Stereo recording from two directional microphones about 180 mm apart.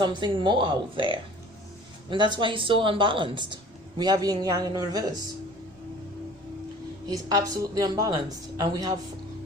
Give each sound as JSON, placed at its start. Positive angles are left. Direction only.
{"t": 0.0, "sound": "speech", "side_deg": -25}
{"t": 7.1, "sound": "speech", "side_deg": -20}